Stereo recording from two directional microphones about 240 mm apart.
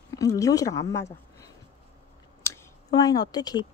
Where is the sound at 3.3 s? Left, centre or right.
Centre.